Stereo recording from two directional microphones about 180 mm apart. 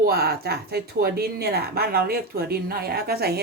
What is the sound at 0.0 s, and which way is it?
Speech, 60° right (ahead or behind).